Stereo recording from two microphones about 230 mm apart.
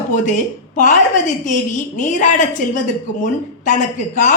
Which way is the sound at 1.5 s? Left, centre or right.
Left.